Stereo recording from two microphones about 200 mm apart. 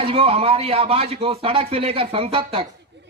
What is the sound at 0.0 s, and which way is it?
Speech, 30° right (ahead or behind).